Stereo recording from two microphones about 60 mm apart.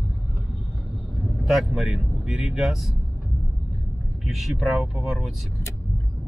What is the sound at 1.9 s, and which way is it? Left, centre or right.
Speech, centre.